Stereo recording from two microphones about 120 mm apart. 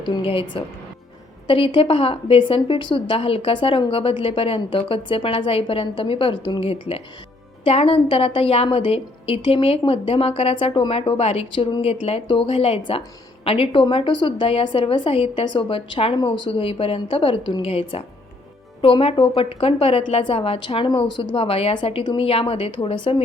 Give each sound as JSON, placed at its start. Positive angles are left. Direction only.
{"t": 0.0, "sound": "a woman's voice", "side_deg": 45}
{"t": 16.1, "sound": "a woman's voice", "side_deg": 40}